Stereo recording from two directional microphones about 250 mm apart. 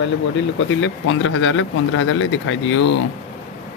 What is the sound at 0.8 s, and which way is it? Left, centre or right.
Speech, left.